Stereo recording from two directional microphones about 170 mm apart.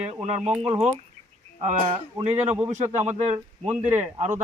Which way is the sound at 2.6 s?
40° right (ahead or behind).